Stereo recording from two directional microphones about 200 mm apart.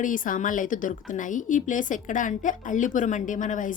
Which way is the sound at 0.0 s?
40° left (ahead or behind).